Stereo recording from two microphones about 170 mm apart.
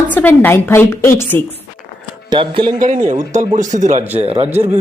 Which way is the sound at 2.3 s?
30° right (ahead or behind).